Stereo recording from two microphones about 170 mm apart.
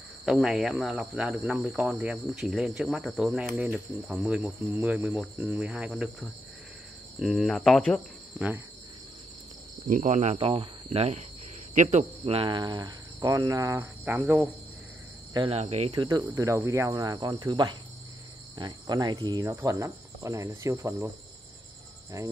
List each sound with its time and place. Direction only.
0.2 s speech: 5° right (ahead or behind)
7.2 s speech: centre (ahead or behind)
9.8 s speech: 45° right (ahead or behind)
10.3 s speech: 35° right (ahead or behind)
12.4 s speech: 25° right (ahead or behind); by 14.5 s 10° right (ahead or behind)
15.3 s speech: 30° right (ahead or behind)
15.9 s speech: 25° right (ahead or behind)